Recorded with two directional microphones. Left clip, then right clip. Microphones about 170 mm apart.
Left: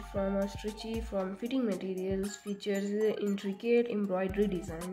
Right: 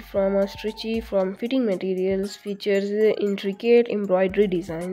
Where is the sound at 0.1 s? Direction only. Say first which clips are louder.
Right 12 dB; 40° right (ahead or behind).